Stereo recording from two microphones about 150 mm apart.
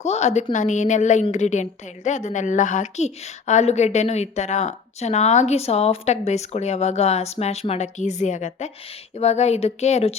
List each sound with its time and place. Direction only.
0.0 s a woman's voice: 50° left (ahead or behind)